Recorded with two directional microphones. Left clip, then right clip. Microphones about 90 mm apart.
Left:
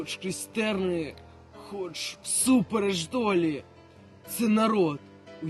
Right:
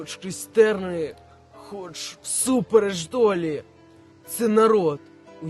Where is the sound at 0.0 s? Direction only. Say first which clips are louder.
Left 1 dB; 45° right (ahead or behind).